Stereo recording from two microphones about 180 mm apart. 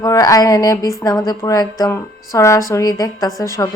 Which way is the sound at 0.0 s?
20° left (ahead or behind).